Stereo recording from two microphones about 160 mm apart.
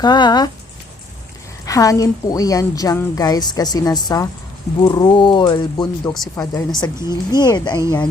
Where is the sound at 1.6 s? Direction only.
20° left (ahead or behind).